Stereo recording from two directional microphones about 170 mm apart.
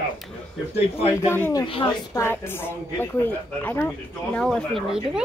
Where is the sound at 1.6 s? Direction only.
30° left (ahead or behind).